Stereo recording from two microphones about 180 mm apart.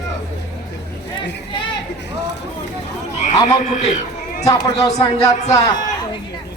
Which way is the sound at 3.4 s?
40° left (ahead or behind).